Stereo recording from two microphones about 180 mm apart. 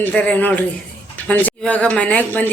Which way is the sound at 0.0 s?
5° left (ahead or behind).